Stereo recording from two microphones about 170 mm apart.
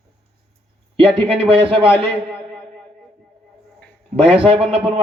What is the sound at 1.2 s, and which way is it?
Speech, 35° right (ahead or behind).